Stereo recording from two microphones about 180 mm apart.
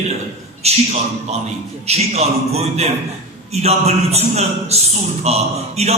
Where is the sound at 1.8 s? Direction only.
35° right (ahead or behind).